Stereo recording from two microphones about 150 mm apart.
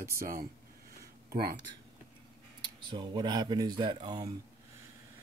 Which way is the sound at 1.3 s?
90° right.